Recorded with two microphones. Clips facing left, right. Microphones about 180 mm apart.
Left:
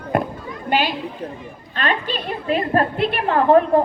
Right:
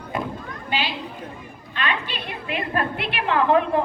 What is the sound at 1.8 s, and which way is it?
A woman's voice, 45° left (ahead or behind).